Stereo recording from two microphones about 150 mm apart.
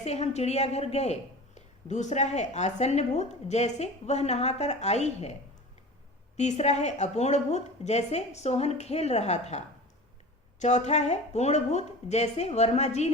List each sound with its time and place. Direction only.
0.0 s a woman's voice: 45° left (ahead or behind)